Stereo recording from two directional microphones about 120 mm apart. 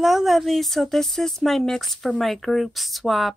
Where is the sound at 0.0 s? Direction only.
Centre (ahead or behind).